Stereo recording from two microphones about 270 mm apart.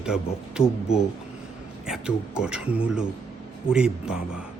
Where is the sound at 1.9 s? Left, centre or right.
Centre.